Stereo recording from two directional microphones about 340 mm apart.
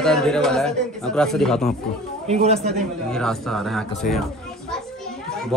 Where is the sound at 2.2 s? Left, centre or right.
Centre.